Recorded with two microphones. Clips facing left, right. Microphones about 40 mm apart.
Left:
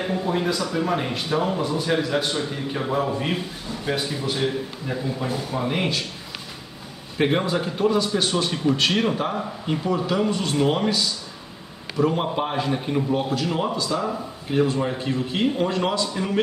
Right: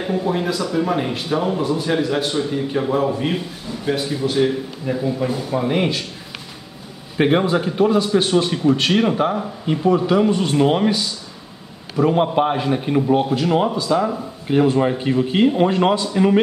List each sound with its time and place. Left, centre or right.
0.0 s a man's voice: centre
7.2 s a man's voice: centre